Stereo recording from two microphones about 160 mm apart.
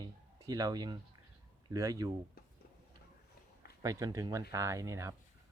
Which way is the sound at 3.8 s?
20° right (ahead or behind).